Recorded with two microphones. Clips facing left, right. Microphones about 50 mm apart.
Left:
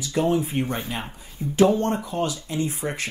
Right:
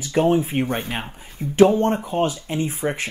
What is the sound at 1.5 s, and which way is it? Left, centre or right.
Speech, right.